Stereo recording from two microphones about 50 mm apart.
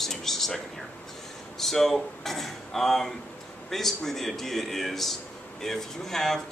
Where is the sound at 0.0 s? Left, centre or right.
Centre.